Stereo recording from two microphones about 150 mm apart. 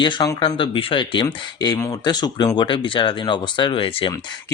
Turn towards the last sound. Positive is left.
turn(degrees=35)  # may be behind; listen again after turning